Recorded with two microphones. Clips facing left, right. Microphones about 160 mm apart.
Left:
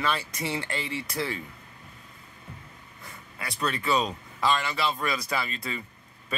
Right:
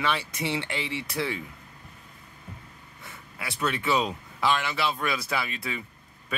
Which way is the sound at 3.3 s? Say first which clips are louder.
Right 1 dB; centre (ahead or behind).